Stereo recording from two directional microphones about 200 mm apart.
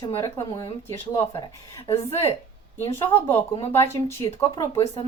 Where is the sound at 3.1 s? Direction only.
10° left (ahead or behind).